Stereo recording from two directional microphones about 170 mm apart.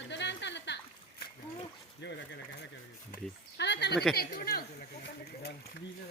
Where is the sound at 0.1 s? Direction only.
90° left.